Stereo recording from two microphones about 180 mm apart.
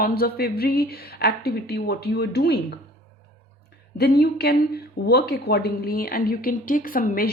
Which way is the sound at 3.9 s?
60° left (ahead or behind).